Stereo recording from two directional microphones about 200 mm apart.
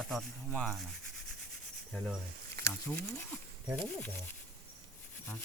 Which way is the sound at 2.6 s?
50° right (ahead or behind).